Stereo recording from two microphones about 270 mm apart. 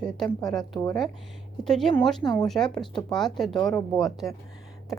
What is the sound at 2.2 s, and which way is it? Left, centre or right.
Speech, centre.